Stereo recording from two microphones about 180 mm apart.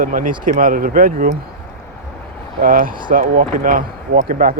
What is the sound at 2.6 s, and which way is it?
Speech, 50° right (ahead or behind).